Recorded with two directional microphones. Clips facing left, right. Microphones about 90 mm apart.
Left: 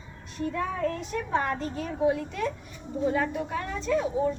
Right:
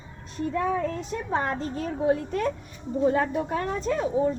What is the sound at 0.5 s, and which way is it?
A woman's voice, 25° right (ahead or behind).